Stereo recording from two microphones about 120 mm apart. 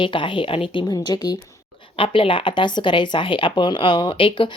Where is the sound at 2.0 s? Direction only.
50° left (ahead or behind).